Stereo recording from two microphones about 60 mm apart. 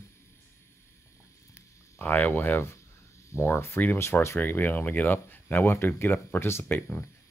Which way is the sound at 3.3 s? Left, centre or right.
Left.